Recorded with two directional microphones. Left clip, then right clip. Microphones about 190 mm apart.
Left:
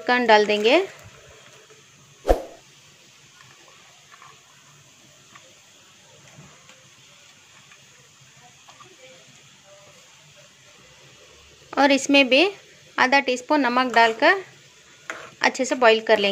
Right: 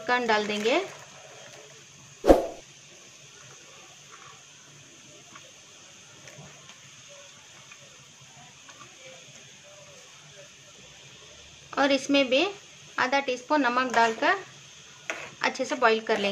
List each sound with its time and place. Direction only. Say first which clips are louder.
0.0 s speech: left 8 dB; 35° left (ahead or behind)
11.7 s a woman's voice: left 6 dB; 35° left (ahead or behind)